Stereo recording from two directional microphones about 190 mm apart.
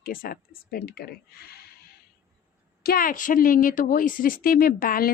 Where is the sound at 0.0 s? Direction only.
50° left (ahead or behind).